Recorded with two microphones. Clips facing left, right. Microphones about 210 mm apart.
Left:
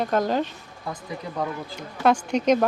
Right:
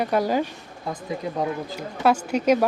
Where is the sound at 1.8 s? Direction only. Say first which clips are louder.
Left 1 dB; 5° right (ahead or behind).